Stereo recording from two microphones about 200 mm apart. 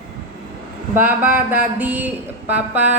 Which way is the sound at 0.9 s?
10° right (ahead or behind).